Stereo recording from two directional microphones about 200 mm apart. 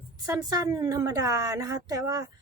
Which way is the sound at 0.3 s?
15° right (ahead or behind).